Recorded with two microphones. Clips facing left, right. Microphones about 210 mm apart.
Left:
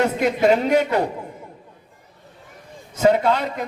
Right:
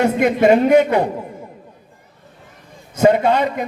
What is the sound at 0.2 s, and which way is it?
Speech, 55° right (ahead or behind).